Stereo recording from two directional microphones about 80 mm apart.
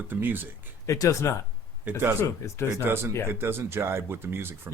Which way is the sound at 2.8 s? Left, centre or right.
Right.